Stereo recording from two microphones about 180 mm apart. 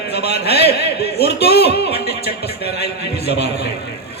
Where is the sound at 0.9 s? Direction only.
65° left (ahead or behind).